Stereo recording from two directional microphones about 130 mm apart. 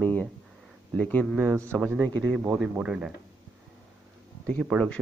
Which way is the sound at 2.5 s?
10° right (ahead or behind).